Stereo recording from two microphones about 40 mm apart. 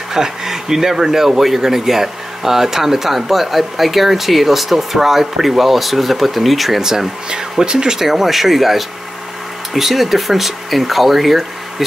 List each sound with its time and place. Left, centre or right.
0.1 s speech: centre
6.8 s speech: centre
8.0 s speech: centre